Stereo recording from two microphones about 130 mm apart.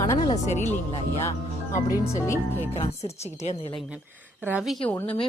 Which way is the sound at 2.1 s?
20° left (ahead or behind).